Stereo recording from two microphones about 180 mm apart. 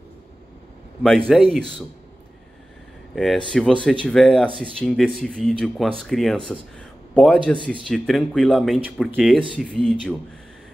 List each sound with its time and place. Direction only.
1.3 s speech: centre (ahead or behind)
3.2 s speech: centre (ahead or behind)